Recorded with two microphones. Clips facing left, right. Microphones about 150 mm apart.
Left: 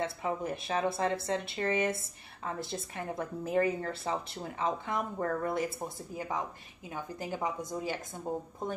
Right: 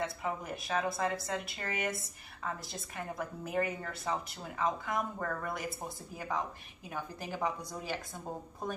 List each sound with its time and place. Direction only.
0.0 s a woman's voice: 25° left (ahead or behind)